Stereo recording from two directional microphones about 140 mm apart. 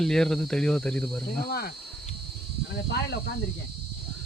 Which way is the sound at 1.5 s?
90° left.